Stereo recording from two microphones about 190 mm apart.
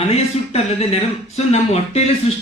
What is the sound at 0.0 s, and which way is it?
Speech, 30° left (ahead or behind).